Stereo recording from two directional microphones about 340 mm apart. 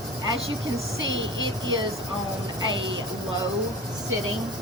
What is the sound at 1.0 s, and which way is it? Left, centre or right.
Speech, right.